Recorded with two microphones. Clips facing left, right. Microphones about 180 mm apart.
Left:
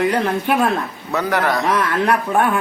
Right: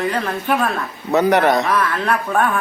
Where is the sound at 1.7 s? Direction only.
20° left (ahead or behind).